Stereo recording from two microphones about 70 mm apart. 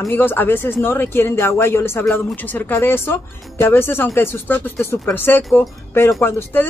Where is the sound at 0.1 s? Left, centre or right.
Left.